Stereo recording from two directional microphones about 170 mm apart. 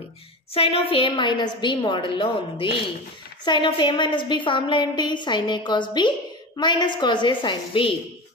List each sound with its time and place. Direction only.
0.6 s a woman's voice: 35° left (ahead or behind)